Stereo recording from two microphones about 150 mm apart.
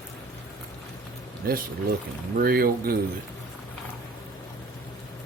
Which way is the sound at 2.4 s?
80° right.